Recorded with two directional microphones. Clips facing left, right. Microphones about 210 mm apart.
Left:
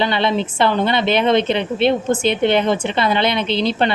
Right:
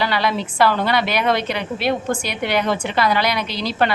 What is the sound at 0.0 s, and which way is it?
A woman's voice, 25° left (ahead or behind).